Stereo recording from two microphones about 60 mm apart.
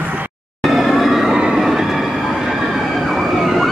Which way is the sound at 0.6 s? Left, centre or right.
Centre.